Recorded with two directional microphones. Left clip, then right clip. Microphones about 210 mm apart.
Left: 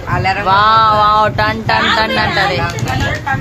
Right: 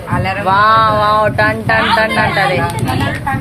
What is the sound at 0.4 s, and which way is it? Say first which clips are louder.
Speech: even; centre (ahead or behind).